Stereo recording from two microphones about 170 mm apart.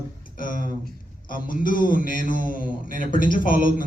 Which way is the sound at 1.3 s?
55° left (ahead or behind).